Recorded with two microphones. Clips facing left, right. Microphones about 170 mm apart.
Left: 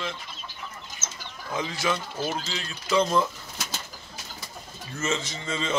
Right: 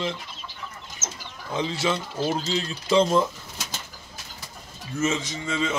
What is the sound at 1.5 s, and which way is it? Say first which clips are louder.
Speech: right 2 dB; 25° right (ahead or behind).